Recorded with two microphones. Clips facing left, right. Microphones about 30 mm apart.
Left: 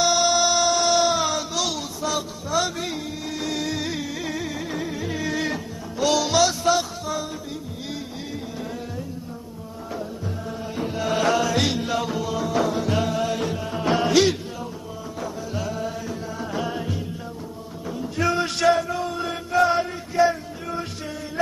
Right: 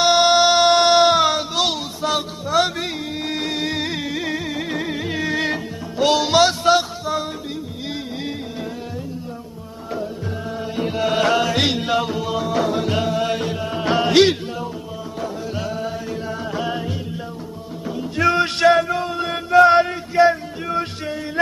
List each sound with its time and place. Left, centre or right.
0.0 s music: right
4.6 s music: right
10.8 s music: right
13.4 s music: right
17.9 s a sound: right
19.2 s music: right
20.2 s a sound: right